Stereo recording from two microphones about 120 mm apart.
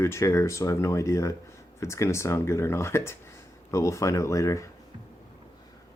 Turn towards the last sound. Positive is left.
turn(degrees=25)  # may be behind; listen again after turning